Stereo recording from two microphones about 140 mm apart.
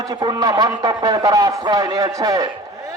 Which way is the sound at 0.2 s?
25° right (ahead or behind).